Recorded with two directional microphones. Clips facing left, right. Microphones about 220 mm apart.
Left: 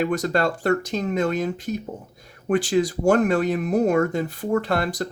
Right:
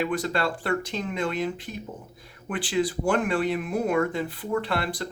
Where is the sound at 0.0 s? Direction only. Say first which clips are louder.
Left 4 dB; 45° left (ahead or behind).